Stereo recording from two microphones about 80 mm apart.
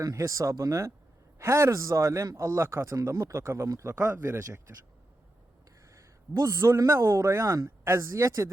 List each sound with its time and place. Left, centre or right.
0.0 s a man's voice: right
5.9 s a man's voice: right